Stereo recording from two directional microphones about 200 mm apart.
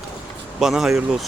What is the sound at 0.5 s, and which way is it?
Speech, centre (ahead or behind).